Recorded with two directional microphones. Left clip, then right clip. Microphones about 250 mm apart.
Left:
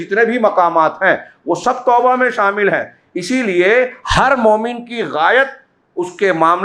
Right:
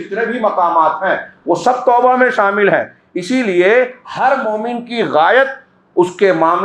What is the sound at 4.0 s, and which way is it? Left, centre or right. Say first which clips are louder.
Speech: left 2 dB; left.